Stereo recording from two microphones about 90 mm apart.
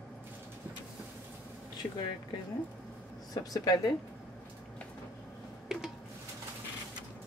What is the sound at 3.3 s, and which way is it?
Speech, 45° left (ahead or behind).